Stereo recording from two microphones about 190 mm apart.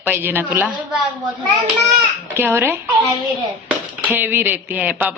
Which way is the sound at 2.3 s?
10° right (ahead or behind).